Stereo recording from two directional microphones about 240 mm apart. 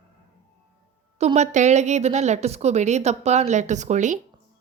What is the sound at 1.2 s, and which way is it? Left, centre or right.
A woman's voice, right.